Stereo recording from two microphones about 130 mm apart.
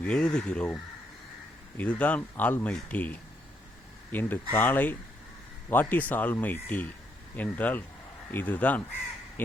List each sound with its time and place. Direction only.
0.0 s speech: 5° left (ahead or behind)
1.8 s speech: 10° left (ahead or behind)